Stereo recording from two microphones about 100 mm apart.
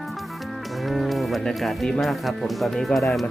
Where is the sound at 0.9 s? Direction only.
Centre (ahead or behind).